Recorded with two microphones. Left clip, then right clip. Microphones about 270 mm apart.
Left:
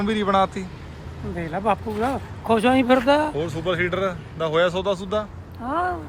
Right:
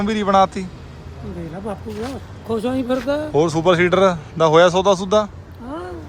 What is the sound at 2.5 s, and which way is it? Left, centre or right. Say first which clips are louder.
Speech: left 4 dB; left.